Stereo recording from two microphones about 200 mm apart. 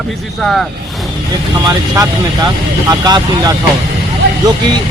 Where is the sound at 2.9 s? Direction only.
20° right (ahead or behind).